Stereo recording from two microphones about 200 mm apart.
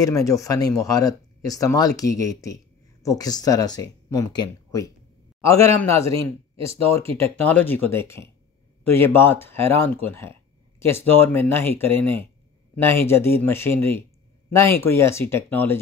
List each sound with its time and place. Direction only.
0.0 s a man's voice: 15° left (ahead or behind)
6.1 s speech: 30° right (ahead or behind)
7.4 s speech: 10° left (ahead or behind)